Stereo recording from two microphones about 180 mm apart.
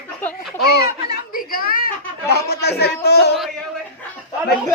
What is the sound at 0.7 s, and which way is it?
A child's voice, 55° left (ahead or behind).